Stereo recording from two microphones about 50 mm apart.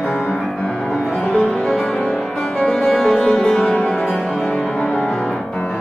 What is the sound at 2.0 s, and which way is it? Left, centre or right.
Music, centre.